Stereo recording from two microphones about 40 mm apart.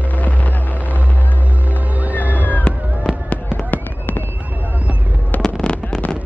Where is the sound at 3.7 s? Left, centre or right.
Left.